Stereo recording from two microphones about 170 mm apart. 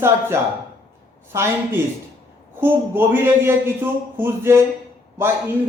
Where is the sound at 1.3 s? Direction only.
15° right (ahead or behind).